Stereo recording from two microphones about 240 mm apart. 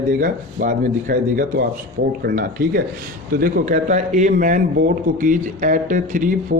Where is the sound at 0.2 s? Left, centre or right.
Right.